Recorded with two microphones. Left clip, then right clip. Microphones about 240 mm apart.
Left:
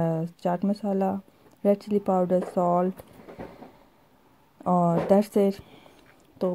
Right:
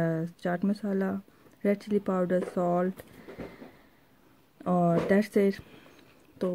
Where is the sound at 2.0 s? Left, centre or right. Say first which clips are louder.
Left 7 dB; left.